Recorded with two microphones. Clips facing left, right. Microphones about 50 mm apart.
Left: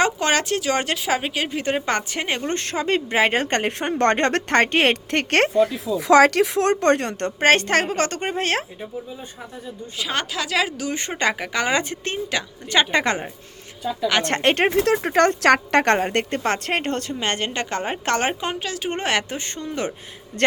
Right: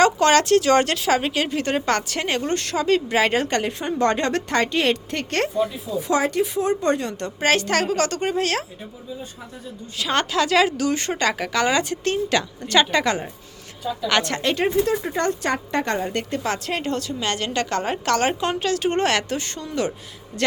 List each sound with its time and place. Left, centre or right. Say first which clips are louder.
0.0 s a woman's voice: right 4 dB; centre
2.5 s a woman's voice: right 3 dB; left
3.5 s a woman's voice: left 1 dB; left
10.0 s a woman's voice: right 5 dB; centre
10.9 s a woman's voice: right 1 dB; centre
11.7 s a woman's voice: right 2 dB; left
12.3 s a woman's voice: even; centre
12.9 s a woman's voice: even; left
14.2 s a woman's voice: left 5 dB; left
18.6 s a woman's voice: right 5 dB; centre; by 19.9 s left